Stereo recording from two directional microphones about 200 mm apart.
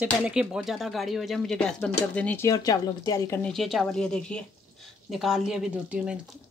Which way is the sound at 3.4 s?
Centre (ahead or behind).